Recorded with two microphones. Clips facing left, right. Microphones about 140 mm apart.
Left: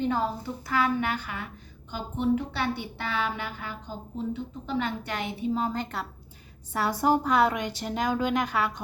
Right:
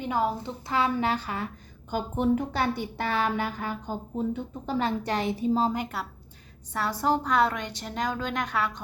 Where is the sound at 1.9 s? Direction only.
45° right (ahead or behind).